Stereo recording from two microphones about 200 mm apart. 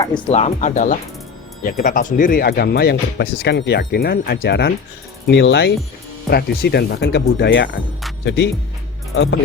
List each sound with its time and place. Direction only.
0.3 s speech: 35° left (ahead or behind); by 9.4 s 65° left (ahead or behind)